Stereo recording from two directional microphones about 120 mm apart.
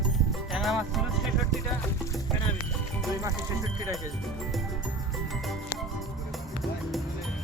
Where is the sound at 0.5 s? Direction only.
Centre (ahead or behind).